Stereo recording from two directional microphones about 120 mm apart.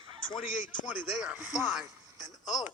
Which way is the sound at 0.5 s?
90° left.